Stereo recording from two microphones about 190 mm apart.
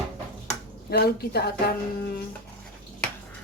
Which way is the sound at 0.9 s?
55° left (ahead or behind).